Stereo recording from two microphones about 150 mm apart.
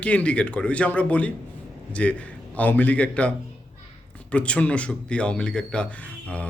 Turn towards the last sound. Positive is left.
turn(degrees=10)  # may be behind; listen again after turning